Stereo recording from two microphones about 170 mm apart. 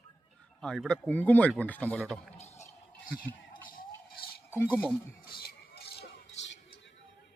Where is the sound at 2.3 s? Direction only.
40° left (ahead or behind).